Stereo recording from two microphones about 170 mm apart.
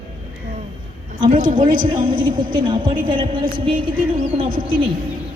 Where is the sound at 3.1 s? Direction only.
30° right (ahead or behind).